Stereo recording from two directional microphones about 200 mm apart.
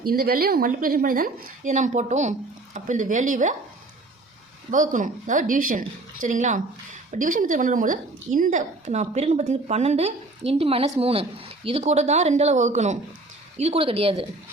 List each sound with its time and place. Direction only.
0.0 s a woman's voice: 50° right (ahead or behind)
4.7 s a woman's voice: 40° right (ahead or behind)